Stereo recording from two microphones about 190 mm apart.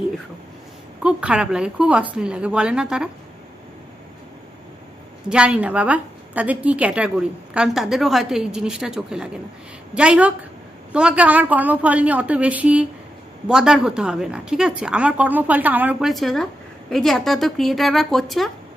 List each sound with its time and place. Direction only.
1.0 s a woman's voice: 5° right (ahead or behind)
5.3 s a woman's voice: 5° right (ahead or behind)